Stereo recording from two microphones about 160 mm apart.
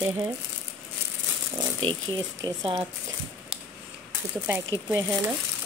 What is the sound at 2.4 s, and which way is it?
Speech, 25° right (ahead or behind).